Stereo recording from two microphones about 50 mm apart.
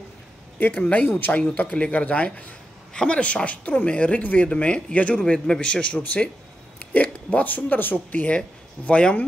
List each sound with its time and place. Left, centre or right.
0.6 s speech: left
1.3 s speech: centre
1.6 s speech: left
4.5 s speech: left
8.4 s speech: left